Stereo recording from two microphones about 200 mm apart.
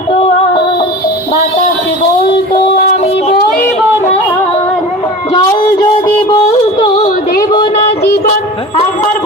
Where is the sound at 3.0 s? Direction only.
30° left (ahead or behind).